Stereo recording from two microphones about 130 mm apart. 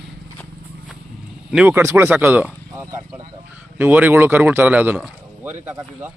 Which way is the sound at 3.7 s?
15° right (ahead or behind).